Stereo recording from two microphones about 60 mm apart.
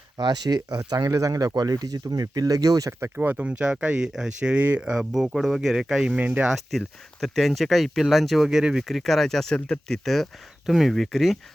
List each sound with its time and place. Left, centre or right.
0.7 s speech: right
3.2 s speech: right
3.6 s speech: centre
4.8 s speech: centre
6.1 s speech: right
6.7 s speech: centre